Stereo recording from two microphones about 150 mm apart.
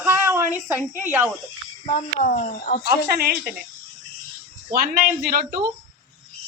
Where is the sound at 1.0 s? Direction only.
15° right (ahead or behind).